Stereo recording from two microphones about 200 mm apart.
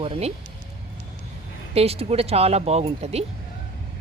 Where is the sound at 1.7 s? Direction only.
30° right (ahead or behind).